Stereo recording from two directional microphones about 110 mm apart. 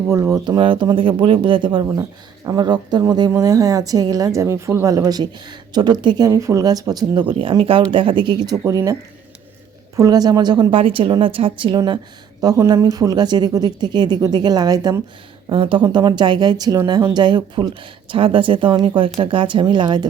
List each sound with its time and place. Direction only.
0.1 s speech: 25° right (ahead or behind)
0.4 s a woman's voice: 45° right (ahead or behind)
6.2 s a woman's voice: 30° right (ahead or behind)
8.6 s a woman's voice: 30° right (ahead or behind)
10.7 s a woman's voice: 55° right (ahead or behind)
12.4 s a woman's voice: 35° right (ahead or behind)
15.4 s a woman's voice: 50° right (ahead or behind)
18.1 s speech: 50° right (ahead or behind)